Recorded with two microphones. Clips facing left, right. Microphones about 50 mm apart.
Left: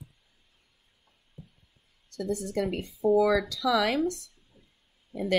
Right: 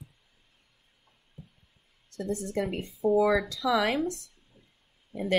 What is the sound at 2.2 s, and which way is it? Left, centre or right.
Speech, centre.